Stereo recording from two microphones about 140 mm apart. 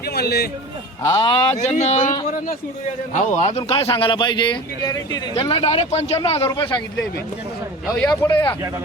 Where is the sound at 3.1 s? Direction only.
60° left (ahead or behind); by 5.3 s 30° left (ahead or behind).